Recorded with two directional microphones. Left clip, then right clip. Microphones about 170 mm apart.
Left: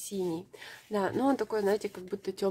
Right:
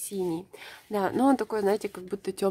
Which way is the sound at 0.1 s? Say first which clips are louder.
Right 3 dB; 35° right (ahead or behind).